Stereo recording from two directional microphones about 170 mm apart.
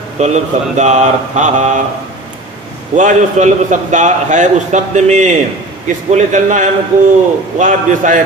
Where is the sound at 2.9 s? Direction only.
45° right (ahead or behind).